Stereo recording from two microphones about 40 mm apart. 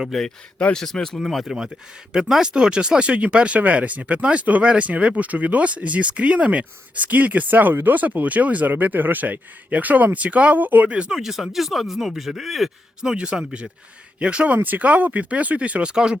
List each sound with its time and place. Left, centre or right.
0.1 s speech: centre
0.6 s speech: left
1.1 s speech: centre
1.5 s speech: centre; by 10.8 s right
10.8 s speech: right
11.1 s speech: centre
13.1 s speech: right
15.9 s speech: centre